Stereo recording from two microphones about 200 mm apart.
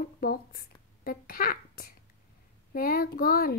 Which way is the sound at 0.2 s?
50° left (ahead or behind).